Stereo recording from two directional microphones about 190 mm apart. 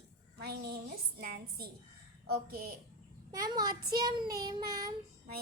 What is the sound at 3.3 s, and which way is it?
Child singing, 20° right (ahead or behind).